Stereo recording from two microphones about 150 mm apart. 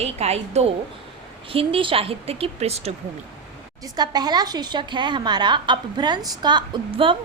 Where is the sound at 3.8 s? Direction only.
25° right (ahead or behind).